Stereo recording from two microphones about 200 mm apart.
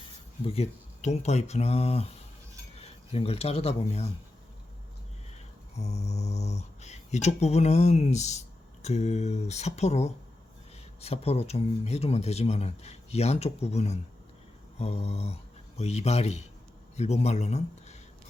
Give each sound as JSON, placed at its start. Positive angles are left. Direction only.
{"t": 0.4, "sound": "speech", "side_deg": 30}
{"t": 5.7, "sound": "speech", "side_deg": 35}